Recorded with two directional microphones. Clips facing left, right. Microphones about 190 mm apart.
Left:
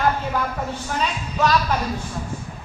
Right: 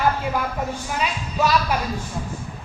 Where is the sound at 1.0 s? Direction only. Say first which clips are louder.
Left 1 dB; 10° right (ahead or behind).